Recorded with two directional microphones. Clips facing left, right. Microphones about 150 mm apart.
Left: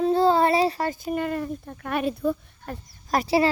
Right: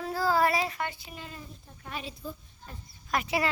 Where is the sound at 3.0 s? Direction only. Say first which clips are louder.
Left 8 dB; 35° left (ahead or behind).